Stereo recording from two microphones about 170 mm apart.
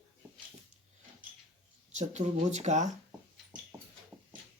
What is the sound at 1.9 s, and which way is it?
Speech, 45° right (ahead or behind).